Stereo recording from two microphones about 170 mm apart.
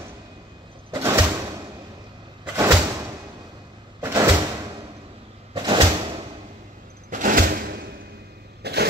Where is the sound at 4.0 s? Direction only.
20° right (ahead or behind).